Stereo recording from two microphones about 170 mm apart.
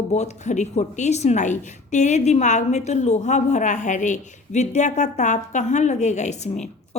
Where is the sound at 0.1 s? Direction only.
40° left (ahead or behind).